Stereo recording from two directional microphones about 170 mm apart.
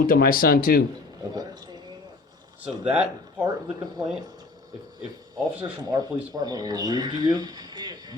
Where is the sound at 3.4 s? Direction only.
25° right (ahead or behind).